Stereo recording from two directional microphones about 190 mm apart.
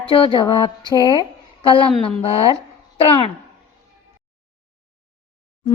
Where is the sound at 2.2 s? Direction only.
30° left (ahead or behind).